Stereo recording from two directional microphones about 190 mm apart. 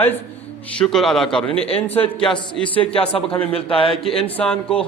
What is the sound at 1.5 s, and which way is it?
Speech, 30° left (ahead or behind).